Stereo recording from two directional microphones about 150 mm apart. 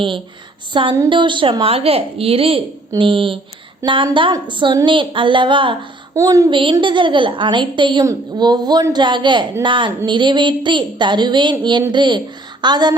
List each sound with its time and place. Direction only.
0.7 s speech: 35° right (ahead or behind)
6.1 s speech: 20° right (ahead or behind)
6.6 s speech: 35° right (ahead or behind)